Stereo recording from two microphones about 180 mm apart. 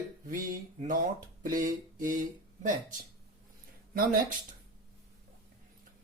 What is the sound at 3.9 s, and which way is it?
Speech, 55° right (ahead or behind).